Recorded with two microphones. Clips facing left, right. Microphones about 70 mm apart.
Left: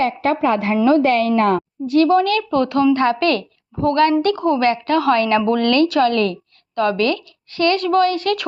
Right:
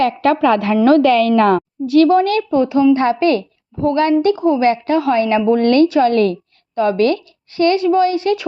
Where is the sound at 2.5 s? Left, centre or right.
Centre.